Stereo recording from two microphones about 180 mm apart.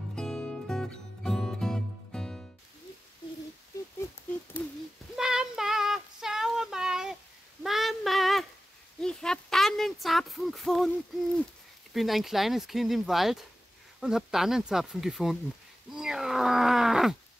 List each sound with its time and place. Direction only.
0.1 s music: 5° left (ahead or behind)
5.1 s child singing: 5° right (ahead or behind)
7.6 s female singing: centre (ahead or behind)
9.0 s a sound: 5° left (ahead or behind)
11.9 s speech: centre (ahead or behind)
15.9 s groan: 5° right (ahead or behind)